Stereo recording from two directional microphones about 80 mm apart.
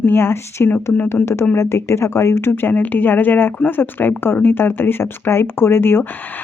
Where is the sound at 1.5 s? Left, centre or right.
Left.